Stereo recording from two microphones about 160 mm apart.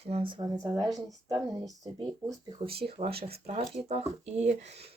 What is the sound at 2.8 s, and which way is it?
Speech, 35° right (ahead or behind).